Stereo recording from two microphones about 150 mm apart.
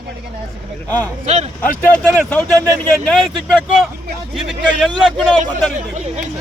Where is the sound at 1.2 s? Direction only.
50° right (ahead or behind).